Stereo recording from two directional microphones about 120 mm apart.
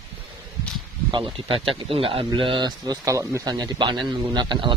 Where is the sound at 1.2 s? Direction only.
50° right (ahead or behind).